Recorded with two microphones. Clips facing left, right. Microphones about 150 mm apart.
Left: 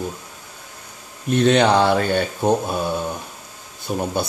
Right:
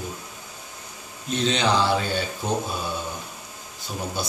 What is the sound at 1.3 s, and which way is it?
Speech, 55° left (ahead or behind).